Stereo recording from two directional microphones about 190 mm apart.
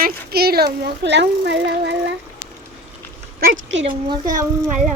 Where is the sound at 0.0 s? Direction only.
55° right (ahead or behind).